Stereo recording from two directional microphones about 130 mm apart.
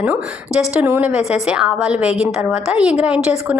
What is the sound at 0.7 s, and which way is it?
A woman's voice, 15° right (ahead or behind).